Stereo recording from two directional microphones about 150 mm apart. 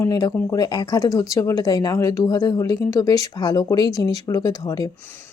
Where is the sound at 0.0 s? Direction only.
25° left (ahead or behind).